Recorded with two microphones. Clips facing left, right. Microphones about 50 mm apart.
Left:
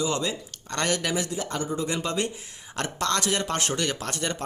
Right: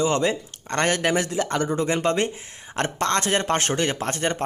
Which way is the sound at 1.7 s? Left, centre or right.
Right.